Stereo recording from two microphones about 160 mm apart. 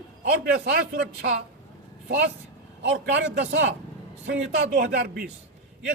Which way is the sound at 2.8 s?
90° right.